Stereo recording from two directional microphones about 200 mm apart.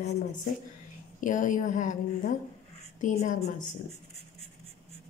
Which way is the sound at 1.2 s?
40° left (ahead or behind).